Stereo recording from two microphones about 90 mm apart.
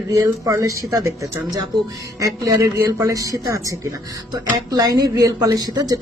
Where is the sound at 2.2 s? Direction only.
40° right (ahead or behind).